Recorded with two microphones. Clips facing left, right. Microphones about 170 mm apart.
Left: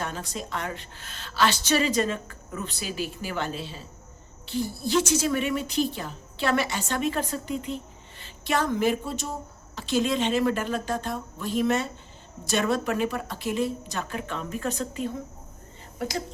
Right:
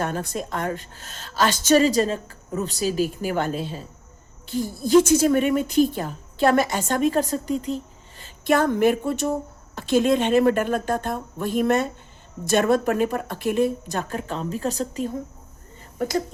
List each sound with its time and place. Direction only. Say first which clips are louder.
0.0 s a woman's voice: right 6 dB; 55° right (ahead or behind); by 7.8 s 40° right (ahead or behind)
8.2 s a woman's voice: right 7 dB; 50° right (ahead or behind)
14.2 s a woman's voice: right 4 dB; 35° right (ahead or behind)
16.0 s speech: right 7 dB; 50° right (ahead or behind)